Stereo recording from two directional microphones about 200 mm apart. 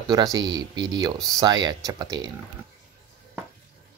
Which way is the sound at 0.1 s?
20° right (ahead or behind).